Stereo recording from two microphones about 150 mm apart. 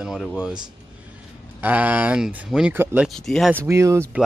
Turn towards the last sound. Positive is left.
turn(degrees=-20)  # may be behind; listen again after turning